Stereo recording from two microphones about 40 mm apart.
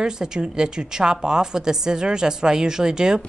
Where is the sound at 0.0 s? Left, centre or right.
Centre.